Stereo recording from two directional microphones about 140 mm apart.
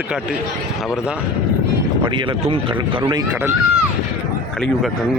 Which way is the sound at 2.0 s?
35° right (ahead or behind).